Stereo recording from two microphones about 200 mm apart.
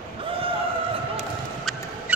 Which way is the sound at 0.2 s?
25° right (ahead or behind).